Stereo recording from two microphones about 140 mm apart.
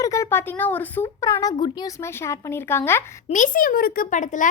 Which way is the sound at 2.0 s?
20° left (ahead or behind).